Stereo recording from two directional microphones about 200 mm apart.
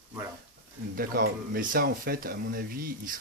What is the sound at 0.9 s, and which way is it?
Speech, 45° right (ahead or behind).